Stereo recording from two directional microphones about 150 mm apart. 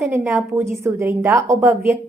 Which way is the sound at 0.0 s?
15° right (ahead or behind).